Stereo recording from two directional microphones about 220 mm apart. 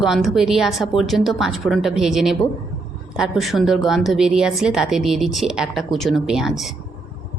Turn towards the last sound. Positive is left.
turn(degrees=0)  # may be behind; listen again after turning